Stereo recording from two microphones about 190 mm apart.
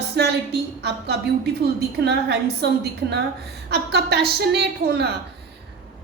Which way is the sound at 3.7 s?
60° right (ahead or behind).